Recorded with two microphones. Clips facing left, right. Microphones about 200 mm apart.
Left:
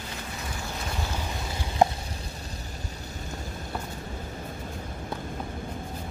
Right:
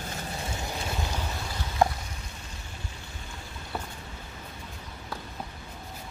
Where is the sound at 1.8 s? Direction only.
20° left (ahead or behind).